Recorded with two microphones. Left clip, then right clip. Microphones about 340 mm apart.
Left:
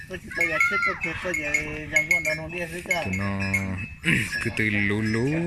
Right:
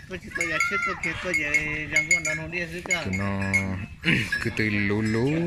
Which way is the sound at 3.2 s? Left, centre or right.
Centre.